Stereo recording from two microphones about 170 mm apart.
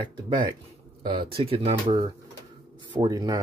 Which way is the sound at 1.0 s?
30° right (ahead or behind).